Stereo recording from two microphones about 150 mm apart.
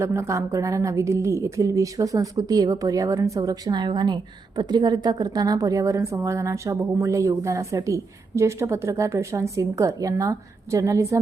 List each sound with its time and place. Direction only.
0.0 s a woman's voice: 20° right (ahead or behind)